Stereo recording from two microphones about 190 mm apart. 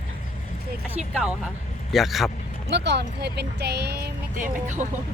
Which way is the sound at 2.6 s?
65° right (ahead or behind).